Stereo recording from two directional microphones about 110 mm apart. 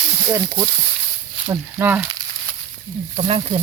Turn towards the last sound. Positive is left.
turn(degrees=-60)  # may be behind; listen again after turning